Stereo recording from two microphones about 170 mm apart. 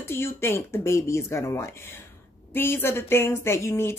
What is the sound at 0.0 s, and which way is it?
Speech, 15° left (ahead or behind).